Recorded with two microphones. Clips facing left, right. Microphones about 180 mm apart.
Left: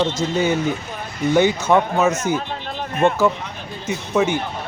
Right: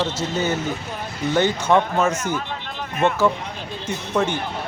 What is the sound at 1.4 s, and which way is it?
Speech, 10° left (ahead or behind).